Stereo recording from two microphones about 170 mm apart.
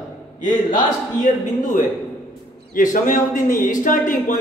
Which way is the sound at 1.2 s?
50° left (ahead or behind).